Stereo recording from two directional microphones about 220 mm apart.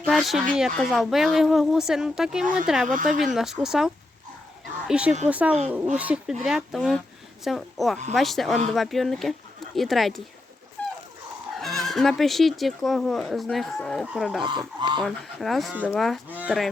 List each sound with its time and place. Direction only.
0.0 s a sound: centre (ahead or behind)
0.5 s speech: centre (ahead or behind)
2.8 s speech: 35° right (ahead or behind)
3.3 s speech: centre (ahead or behind)
10.8 s dog: 5° left (ahead or behind)
11.8 s speech: centre (ahead or behind)
14.8 s speech: 20° right (ahead or behind)
15.0 s speech: centre (ahead or behind)